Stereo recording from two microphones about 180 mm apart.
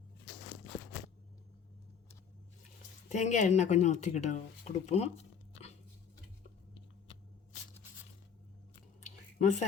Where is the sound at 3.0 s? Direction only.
45° left (ahead or behind).